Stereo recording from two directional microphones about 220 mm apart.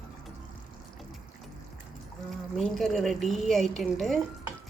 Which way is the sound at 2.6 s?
Centre (ahead or behind).